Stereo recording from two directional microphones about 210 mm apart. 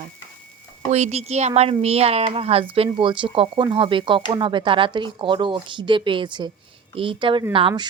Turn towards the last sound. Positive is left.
turn(degrees=-25)  # may be behind; listen again after turning